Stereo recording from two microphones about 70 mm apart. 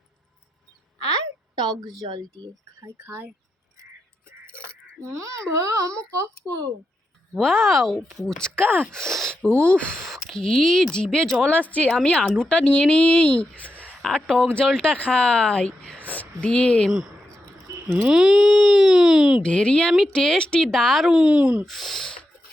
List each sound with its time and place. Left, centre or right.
2.0 s speech: right
2.8 s speech: right
5.1 s speech: right
7.3 s speech: centre
8.5 s speech: right
8.9 s speech: centre
10.1 s speech: centre
11.4 s a woman's voice: left
18.1 s speech: centre
19.4 s speech: centre
21.2 s speech: centre
21.7 s speech: centre